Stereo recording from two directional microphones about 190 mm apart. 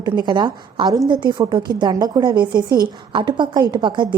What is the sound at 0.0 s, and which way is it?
A woman's voice, 20° right (ahead or behind).